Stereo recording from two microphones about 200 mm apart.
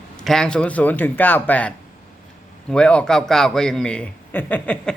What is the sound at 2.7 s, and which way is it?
A man's voice, 5° left (ahead or behind).